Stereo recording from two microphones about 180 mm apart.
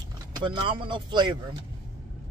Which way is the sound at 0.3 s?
25° right (ahead or behind).